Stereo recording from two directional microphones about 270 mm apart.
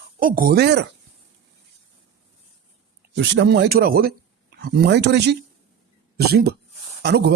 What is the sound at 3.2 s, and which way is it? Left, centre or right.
Speech, right.